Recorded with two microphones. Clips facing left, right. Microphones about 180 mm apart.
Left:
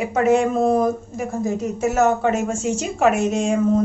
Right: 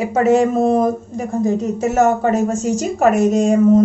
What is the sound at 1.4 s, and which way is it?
Speech, centre (ahead or behind).